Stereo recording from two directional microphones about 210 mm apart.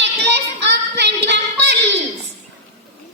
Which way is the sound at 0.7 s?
55° right (ahead or behind).